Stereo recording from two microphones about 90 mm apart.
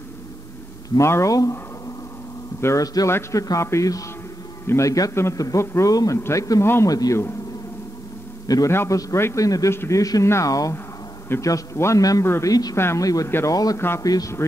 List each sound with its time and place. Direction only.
0.9 s a man's voice: 35° left (ahead or behind)
2.6 s a man's voice: 40° left (ahead or behind)
3.1 s a man's voice: 30° left (ahead or behind)
8.6 s a man's voice: 35° left (ahead or behind)
12.7 s speech: 30° left (ahead or behind)
13.0 s a man's voice: 40° left (ahead or behind)
13.7 s speech: 25° left (ahead or behind)
14.0 s a man's voice: 40° left (ahead or behind)